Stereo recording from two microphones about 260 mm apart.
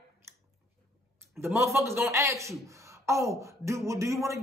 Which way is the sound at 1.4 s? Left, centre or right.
Centre.